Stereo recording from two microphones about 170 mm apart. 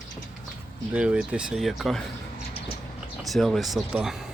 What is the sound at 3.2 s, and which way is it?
Speech, centre (ahead or behind).